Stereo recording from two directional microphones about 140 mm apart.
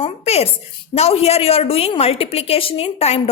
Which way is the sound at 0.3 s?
50° left (ahead or behind).